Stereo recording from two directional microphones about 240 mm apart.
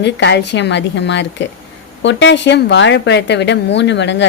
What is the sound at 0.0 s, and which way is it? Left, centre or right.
A woman's voice, left.